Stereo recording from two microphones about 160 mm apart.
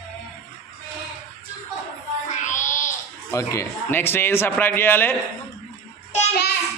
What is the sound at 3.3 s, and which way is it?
A man's voice, 20° left (ahead or behind).